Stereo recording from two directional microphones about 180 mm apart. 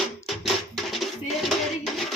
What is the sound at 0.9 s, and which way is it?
Cutlery, centre (ahead or behind).